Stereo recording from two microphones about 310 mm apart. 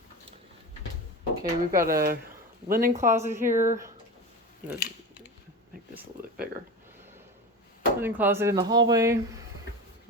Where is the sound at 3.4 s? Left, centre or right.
Right.